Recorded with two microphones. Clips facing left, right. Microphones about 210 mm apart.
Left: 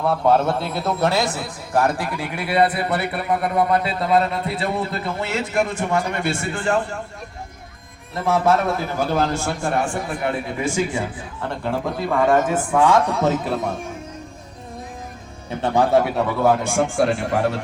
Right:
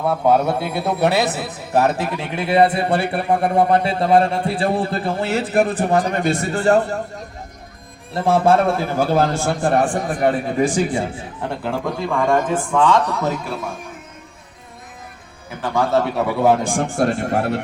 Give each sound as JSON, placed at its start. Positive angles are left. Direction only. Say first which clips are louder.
{"t": 0.0, "sound": "a man's voice", "louder": "right 1 dB", "side_deg": -5}
{"t": 8.1, "sound": "speech", "louder": "right 3 dB", "side_deg": -30}
{"t": 11.6, "sound": "a man's voice", "louder": "even", "side_deg": 0}
{"t": 15.4, "sound": "a man's voice", "louder": "left 2 dB", "side_deg": 20}
{"t": 16.6, "sound": "speech", "louder": "even", "side_deg": -35}